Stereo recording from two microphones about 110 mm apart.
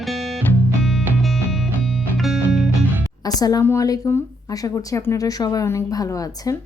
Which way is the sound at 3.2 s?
35° left (ahead or behind).